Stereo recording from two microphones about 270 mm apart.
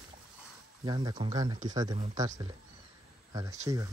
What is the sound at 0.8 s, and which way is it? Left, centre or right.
Speech, centre.